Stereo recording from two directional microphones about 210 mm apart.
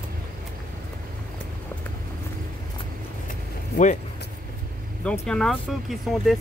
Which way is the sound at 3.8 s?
40° left (ahead or behind).